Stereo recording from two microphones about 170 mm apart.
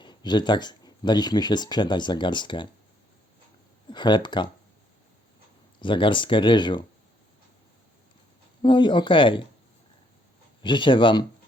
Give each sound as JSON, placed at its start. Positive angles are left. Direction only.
{"t": 0.0, "sound": "speech", "side_deg": 25}
{"t": 3.8, "sound": "speech", "side_deg": 25}
{"t": 5.8, "sound": "speech", "side_deg": 30}
{"t": 8.6, "sound": "speech", "side_deg": 30}
{"t": 10.6, "sound": "speech", "side_deg": 30}